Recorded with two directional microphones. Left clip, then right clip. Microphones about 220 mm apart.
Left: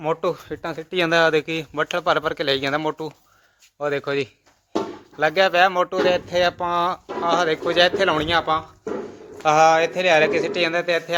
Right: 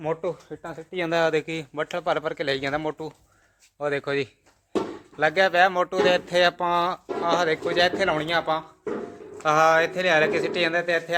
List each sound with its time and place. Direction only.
0.2 s speech: 20° left (ahead or behind)